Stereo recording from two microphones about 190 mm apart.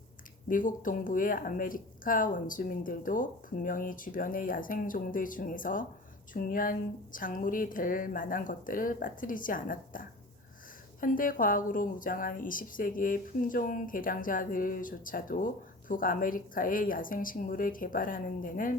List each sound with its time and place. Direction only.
0.4 s speech: 45° left (ahead or behind)